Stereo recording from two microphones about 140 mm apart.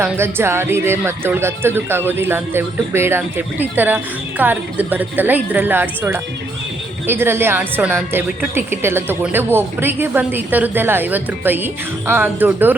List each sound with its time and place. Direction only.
0.0 s speech: 15° right (ahead or behind)